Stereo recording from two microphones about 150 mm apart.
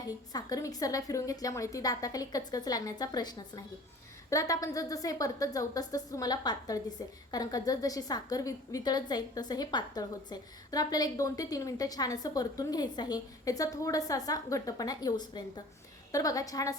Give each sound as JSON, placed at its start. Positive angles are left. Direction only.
{"t": 0.0, "sound": "a woman's voice", "side_deg": 25}